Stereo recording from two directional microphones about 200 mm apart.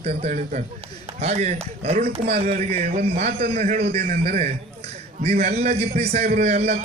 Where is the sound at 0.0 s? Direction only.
35° right (ahead or behind).